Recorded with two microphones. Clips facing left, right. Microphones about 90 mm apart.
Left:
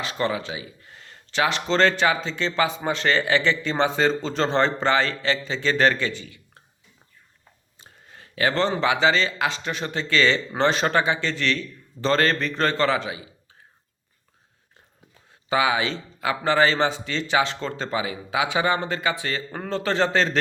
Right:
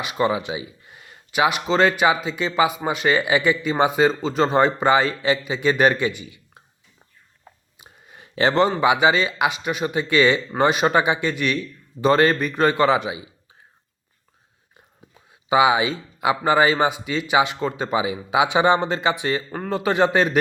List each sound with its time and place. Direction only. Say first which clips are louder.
0.0 s speech: right 4 dB; 15° right (ahead or behind)
7.8 s a sound: left 1 dB; 10° right (ahead or behind)
8.8 s speech: right 3 dB; 15° right (ahead or behind)
15.1 s speech: right 5 dB; 15° right (ahead or behind)
19.5 s speech: right 3 dB; 5° right (ahead or behind)